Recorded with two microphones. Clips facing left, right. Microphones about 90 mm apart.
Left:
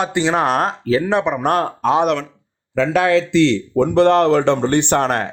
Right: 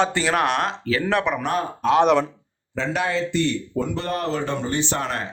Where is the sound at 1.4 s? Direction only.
70° left (ahead or behind).